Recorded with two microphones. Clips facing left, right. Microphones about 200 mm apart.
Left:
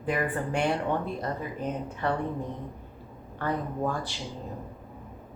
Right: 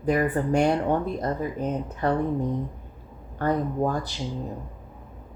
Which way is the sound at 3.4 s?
40° right (ahead or behind).